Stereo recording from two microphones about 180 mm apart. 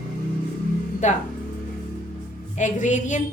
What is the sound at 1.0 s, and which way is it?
Speech, 40° left (ahead or behind).